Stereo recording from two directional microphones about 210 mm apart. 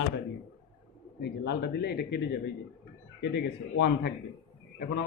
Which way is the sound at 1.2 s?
50° left (ahead or behind).